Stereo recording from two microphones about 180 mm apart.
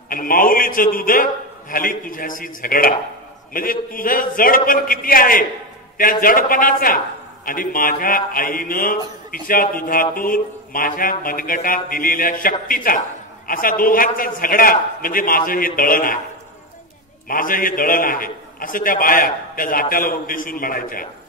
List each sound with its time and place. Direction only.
0.1 s a man's voice: 50° left (ahead or behind)
17.3 s a man's voice: 50° left (ahead or behind)